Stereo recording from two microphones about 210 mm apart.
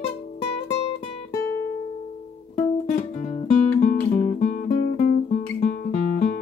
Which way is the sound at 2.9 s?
35° left (ahead or behind).